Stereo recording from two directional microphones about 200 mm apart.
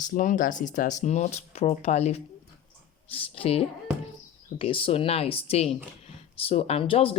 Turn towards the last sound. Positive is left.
turn(degrees=25)  # may be behind; listen again after turning